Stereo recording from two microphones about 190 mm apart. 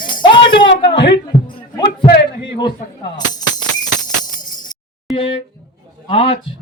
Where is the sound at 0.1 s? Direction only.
25° left (ahead or behind).